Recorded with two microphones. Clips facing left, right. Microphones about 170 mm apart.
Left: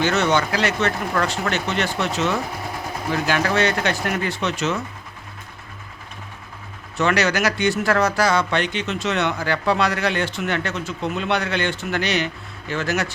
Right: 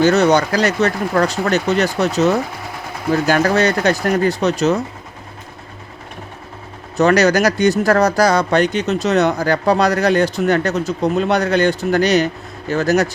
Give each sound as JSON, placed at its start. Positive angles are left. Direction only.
{"t": 0.0, "sound": "speech", "side_deg": -40}
{"t": 6.9, "sound": "speech", "side_deg": -40}